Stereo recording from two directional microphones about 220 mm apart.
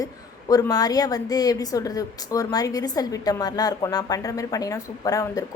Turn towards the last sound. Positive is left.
turn(degrees=15)  # may be behind; listen again after turning